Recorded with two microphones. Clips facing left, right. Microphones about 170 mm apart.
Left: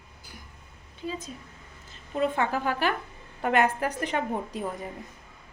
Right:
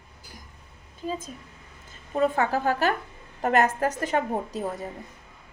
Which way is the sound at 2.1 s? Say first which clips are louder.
Right 3 dB; 40° right (ahead or behind).